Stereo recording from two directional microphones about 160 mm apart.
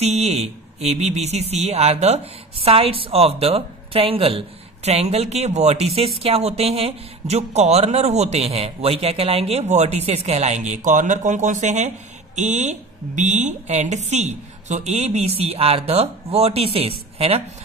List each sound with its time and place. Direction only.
0.0 s speech: 45° right (ahead or behind)